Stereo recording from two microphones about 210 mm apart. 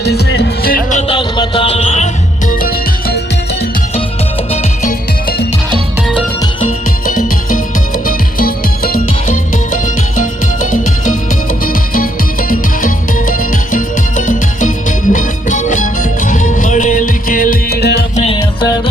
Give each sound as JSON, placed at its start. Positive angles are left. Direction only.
{"t": 0.0, "sound": "music", "side_deg": 50}
{"t": 2.5, "sound": "music", "side_deg": 45}
{"t": 4.5, "sound": "music", "side_deg": 35}
{"t": 7.1, "sound": "music", "side_deg": 40}
{"t": 11.6, "sound": "music", "side_deg": 40}
{"t": 18.2, "sound": "music", "side_deg": 25}